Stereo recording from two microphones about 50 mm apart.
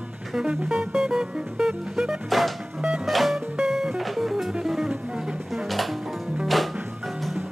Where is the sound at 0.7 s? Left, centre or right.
Centre.